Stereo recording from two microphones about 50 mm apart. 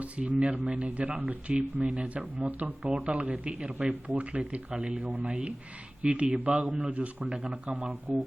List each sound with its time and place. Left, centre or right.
0.0 s speech: right
4.7 s speech: centre
4.9 s speech: right